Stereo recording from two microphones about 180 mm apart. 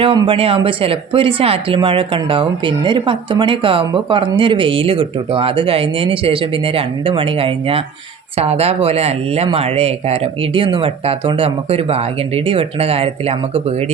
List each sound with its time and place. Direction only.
0.0 s speech: 30° right (ahead or behind)